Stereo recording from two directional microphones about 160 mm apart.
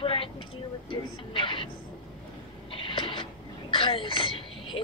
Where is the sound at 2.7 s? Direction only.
30° left (ahead or behind).